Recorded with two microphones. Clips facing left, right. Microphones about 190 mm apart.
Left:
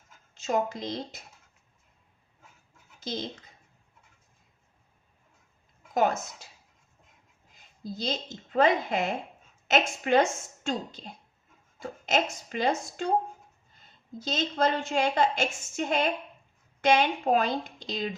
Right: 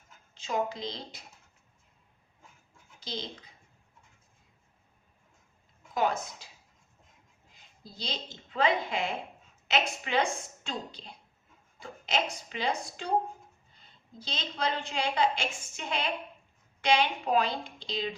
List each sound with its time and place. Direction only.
0.3 s a woman's voice: 45° left (ahead or behind)
3.0 s speech: 45° left (ahead or behind)
5.9 s a woman's voice: 45° left (ahead or behind)
7.9 s a woman's voice: 45° left (ahead or behind)
14.2 s a woman's voice: 45° left (ahead or behind)